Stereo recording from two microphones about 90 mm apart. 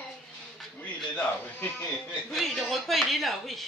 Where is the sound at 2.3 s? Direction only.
Centre (ahead or behind).